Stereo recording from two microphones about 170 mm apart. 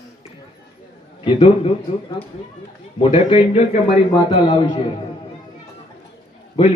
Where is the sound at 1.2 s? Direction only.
30° left (ahead or behind).